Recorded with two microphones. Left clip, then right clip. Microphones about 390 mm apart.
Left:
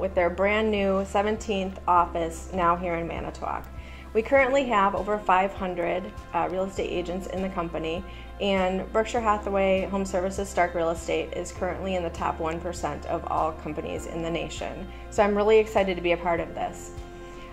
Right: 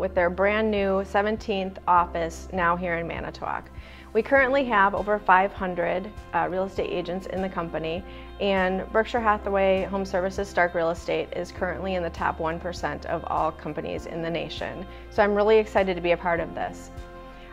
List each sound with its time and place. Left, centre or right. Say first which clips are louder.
0.0 s a woman's voice: right 1 dB; right